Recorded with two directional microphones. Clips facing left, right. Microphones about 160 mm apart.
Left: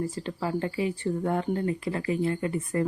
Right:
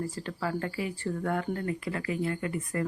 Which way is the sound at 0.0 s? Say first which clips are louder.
Left 3 dB; 20° left (ahead or behind).